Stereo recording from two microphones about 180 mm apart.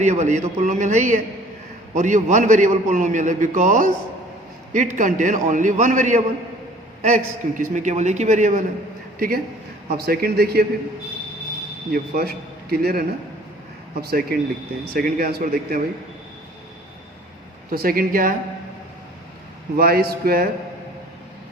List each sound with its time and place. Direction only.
0.0 s a man's voice: 40° right (ahead or behind); by 10.7 s 60° right (ahead or behind)
11.9 s a man's voice: 55° right (ahead or behind)
17.7 s a man's voice: 55° right (ahead or behind)
19.7 s speech: 55° right (ahead or behind)